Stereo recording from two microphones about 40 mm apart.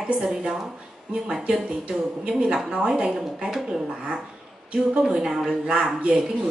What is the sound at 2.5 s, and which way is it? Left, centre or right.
Speech, centre.